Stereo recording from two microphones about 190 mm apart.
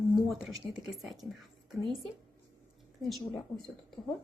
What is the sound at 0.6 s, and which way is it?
Speech, centre (ahead or behind).